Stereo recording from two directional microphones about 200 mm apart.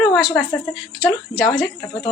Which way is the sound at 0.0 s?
Centre (ahead or behind).